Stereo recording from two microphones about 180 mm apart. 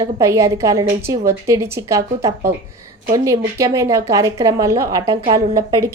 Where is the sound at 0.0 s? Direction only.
15° right (ahead or behind).